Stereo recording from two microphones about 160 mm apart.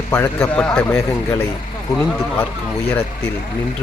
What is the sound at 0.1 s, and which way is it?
Speech, 15° left (ahead or behind).